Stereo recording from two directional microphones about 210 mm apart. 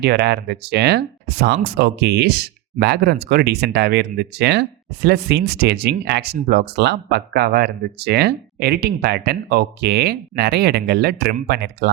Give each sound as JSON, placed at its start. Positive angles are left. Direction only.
{"t": 0.0, "sound": "speech", "side_deg": -50}